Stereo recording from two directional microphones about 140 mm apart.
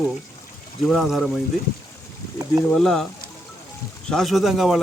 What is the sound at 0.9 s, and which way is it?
Speech, centre (ahead or behind).